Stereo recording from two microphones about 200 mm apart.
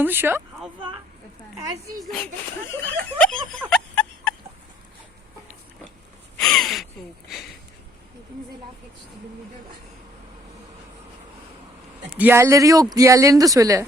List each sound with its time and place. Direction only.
0.0 s speech: 10° right (ahead or behind)
2.1 s speech: 5° left (ahead or behind)
3.2 s a sound: 5° left (ahead or behind)
6.4 s gasp: centre (ahead or behind)
12.1 s speech: 10° right (ahead or behind)